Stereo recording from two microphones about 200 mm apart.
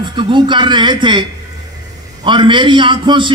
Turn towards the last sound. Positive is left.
turn(degrees=-25)  # may be behind; listen again after turning